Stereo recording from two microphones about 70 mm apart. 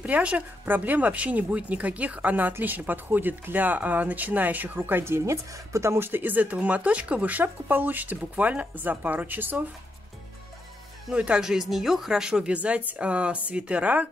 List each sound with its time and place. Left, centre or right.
0.0 s speech: centre
11.1 s speech: centre